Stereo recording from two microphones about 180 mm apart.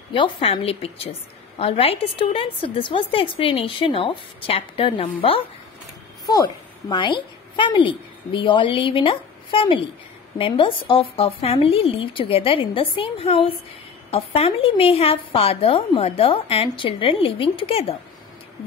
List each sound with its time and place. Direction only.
0.1 s a woman's voice: 30° left (ahead or behind)